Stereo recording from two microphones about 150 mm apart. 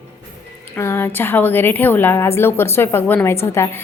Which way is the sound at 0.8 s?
15° left (ahead or behind).